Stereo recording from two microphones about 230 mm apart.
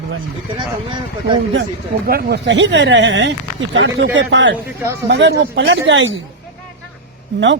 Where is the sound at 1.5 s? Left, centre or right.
Right.